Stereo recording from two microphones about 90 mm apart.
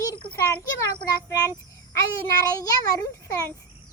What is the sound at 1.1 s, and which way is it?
A child's voice, 40° left (ahead or behind).